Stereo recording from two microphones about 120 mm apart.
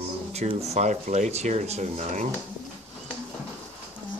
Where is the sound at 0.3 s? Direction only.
60° right (ahead or behind).